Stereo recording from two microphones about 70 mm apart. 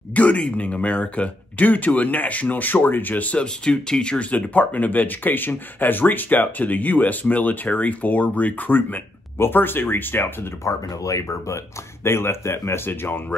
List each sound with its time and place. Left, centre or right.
0.1 s speech: centre
10.6 s speech: left